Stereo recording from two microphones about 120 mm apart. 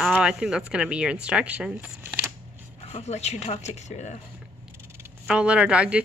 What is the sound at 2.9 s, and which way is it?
Speech, 60° left (ahead or behind).